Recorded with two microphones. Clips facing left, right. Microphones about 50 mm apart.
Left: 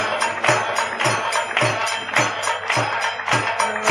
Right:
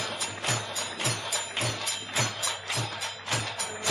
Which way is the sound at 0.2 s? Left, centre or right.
Left.